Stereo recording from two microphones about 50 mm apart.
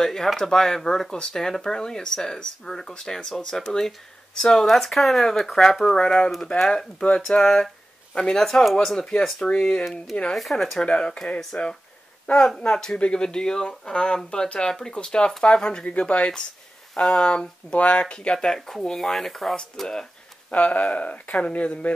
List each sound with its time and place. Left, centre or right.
0.0 s speech: centre
5.9 s speech: centre
8.5 s speech: centre
9.6 s speech: centre
10.9 s speech: centre
17.7 s speech: left; by 19.5 s centre
19.8 s a sound: centre
20.5 s speech: left